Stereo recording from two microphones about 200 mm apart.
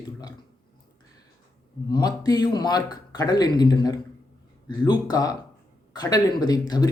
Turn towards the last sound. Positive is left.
turn(degrees=20)  # may be behind; listen again after turning